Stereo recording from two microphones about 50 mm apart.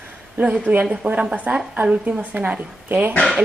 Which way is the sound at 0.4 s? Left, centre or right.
Right.